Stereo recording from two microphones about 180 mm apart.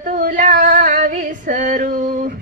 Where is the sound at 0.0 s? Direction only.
45° right (ahead or behind).